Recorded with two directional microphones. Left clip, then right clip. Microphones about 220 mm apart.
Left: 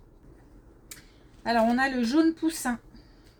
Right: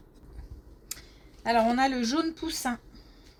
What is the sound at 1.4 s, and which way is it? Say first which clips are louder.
A woman's voice: even; 30° right (ahead or behind).